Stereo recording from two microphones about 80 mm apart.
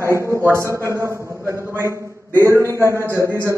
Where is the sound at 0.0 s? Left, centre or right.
Right.